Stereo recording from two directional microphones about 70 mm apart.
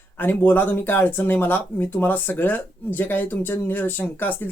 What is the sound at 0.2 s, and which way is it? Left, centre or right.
Speech, left.